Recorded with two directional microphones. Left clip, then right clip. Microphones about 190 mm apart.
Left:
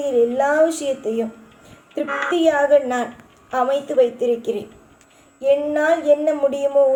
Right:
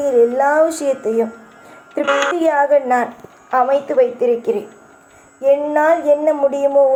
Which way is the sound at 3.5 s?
5° left (ahead or behind).